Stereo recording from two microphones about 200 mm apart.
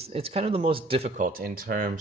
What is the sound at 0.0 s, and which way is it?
Speech, 30° right (ahead or behind).